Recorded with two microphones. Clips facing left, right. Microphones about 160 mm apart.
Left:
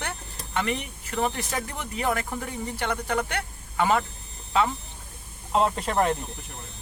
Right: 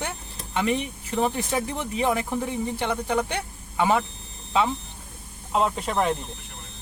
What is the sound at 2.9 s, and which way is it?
Speech, 10° right (ahead or behind).